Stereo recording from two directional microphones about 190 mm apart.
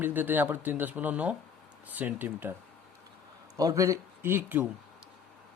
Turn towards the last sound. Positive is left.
turn(degrees=-10)  # may be behind; listen again after turning